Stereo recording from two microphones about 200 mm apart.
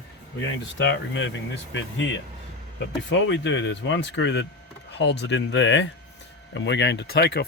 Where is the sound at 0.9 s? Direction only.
65° left (ahead or behind).